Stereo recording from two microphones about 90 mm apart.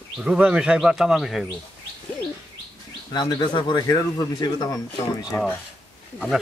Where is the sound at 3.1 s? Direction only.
50° left (ahead or behind).